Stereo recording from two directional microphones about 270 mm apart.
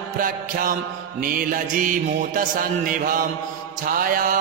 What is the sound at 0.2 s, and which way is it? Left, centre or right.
Mantra, right.